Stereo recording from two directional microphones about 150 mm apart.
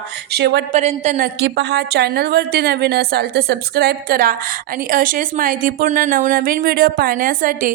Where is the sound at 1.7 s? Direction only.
90° right.